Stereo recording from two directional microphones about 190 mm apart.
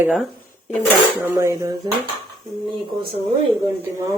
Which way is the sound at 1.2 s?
15° right (ahead or behind).